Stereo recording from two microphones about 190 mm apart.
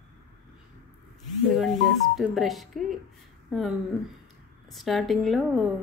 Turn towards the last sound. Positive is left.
turn(degrees=0)  # may be behind; listen again after turning